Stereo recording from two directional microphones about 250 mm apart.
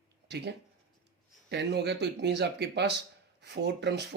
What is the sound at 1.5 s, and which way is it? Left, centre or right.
Speech, right.